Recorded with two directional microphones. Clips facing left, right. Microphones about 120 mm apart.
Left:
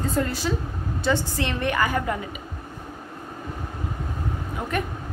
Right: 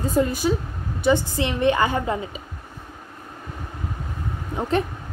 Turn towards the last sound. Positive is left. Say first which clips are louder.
# right 5 dB
turn(degrees=-25)  # may be behind; listen again after turning